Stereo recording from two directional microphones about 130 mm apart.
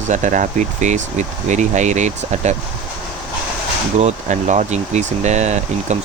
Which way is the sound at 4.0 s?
65° right (ahead or behind).